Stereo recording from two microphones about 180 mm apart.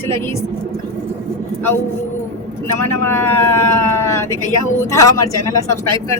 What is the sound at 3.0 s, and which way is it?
Speech, 15° left (ahead or behind).